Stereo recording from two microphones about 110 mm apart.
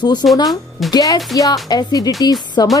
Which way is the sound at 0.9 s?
35° left (ahead or behind).